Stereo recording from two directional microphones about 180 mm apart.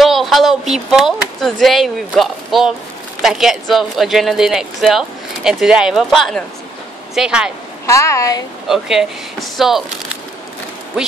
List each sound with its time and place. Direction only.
0.0 s speech: centre (ahead or behind)
7.8 s a woman's voice: 15° left (ahead or behind)
8.6 s speech: centre (ahead or behind)